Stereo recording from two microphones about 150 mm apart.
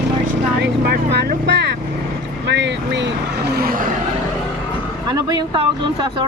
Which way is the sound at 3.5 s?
80° right.